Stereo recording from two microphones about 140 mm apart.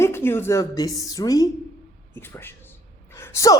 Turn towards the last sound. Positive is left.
turn(degrees=20)  # may be behind; listen again after turning